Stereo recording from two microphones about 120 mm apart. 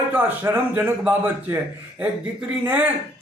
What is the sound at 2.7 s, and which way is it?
Speech, 15° right (ahead or behind).